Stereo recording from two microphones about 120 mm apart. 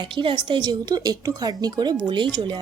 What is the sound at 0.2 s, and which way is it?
Speech, 40° right (ahead or behind).